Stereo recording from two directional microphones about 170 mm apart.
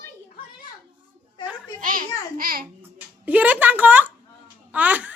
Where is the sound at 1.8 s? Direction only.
50° right (ahead or behind).